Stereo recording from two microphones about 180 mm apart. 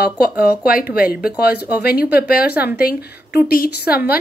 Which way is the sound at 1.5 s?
10° right (ahead or behind).